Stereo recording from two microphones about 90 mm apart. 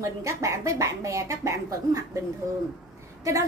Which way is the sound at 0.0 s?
35° right (ahead or behind).